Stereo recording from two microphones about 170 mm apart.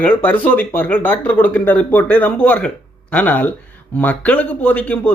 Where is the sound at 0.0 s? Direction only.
10° left (ahead or behind).